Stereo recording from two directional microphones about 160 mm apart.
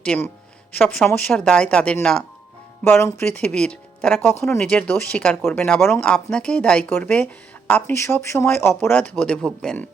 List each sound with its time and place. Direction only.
0.0 s speech: 5° left (ahead or behind)
4.4 s speech: 15° left (ahead or behind)
4.6 s speech: 5° left (ahead or behind)